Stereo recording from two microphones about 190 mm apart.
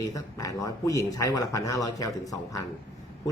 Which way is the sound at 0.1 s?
20° left (ahead or behind).